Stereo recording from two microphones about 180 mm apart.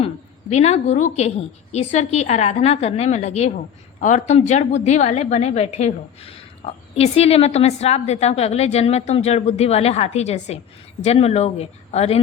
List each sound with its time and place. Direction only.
0.5 s a woman's voice: 40° left (ahead or behind)